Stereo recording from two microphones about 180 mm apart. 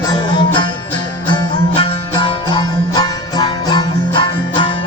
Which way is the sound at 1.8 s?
25° left (ahead or behind).